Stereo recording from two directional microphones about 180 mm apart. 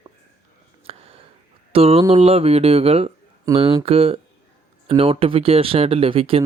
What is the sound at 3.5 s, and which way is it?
Speech, 20° right (ahead or behind).